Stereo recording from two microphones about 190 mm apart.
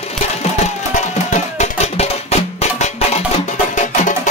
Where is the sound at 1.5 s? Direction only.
35° left (ahead or behind).